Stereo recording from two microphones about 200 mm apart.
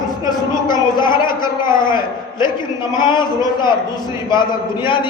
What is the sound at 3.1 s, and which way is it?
A woman's voice, 20° left (ahead or behind).